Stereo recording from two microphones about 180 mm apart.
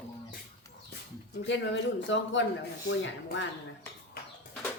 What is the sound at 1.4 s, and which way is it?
Speech, 90° left.